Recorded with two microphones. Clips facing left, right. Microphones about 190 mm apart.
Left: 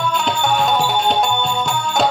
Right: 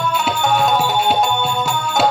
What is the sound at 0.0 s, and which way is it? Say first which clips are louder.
Music: even; 5° right (ahead or behind).